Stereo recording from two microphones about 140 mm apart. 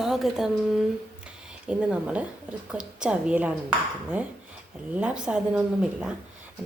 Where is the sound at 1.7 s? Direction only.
10° right (ahead or behind).